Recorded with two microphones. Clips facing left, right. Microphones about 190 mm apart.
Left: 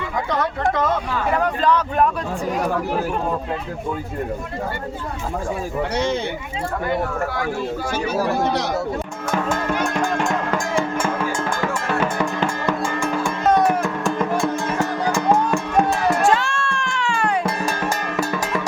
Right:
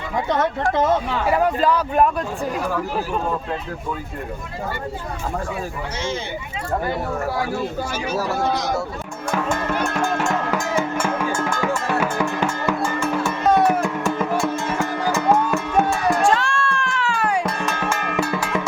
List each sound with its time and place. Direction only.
1.3 s a man's voice: 5° right (ahead or behind)
8.2 s speech: 15° left (ahead or behind)
9.3 s speech: centre (ahead or behind)
10.5 s music: 5° right (ahead or behind)
16.2 s music: centre (ahead or behind)